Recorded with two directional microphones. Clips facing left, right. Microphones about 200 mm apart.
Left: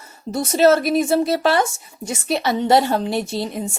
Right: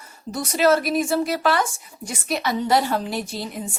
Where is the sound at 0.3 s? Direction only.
25° left (ahead or behind).